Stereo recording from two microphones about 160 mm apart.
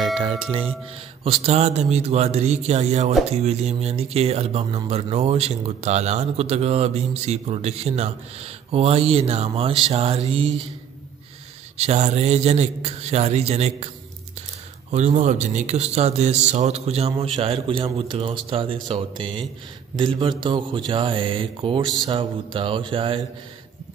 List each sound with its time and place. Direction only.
0.2 s a man's voice: 35° right (ahead or behind)
11.7 s a man's voice: 45° right (ahead or behind)
14.9 s a man's voice: 50° right (ahead or behind)